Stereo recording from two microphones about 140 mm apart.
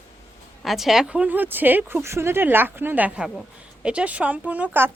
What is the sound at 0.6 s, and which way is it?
Speech, centre (ahead or behind).